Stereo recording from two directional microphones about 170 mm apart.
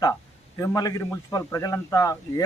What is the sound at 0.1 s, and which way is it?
A man's voice, 20° left (ahead or behind).